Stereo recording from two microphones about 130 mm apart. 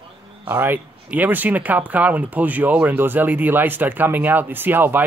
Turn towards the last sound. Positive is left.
turn(degrees=-15)  # may be behind; listen again after turning